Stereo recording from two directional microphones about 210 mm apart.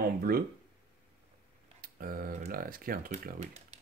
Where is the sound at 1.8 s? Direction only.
45° right (ahead or behind).